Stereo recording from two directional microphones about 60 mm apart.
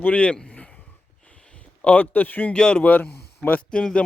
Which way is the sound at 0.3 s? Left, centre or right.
Centre.